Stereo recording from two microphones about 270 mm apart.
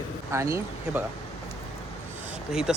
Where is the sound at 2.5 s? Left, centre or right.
Centre.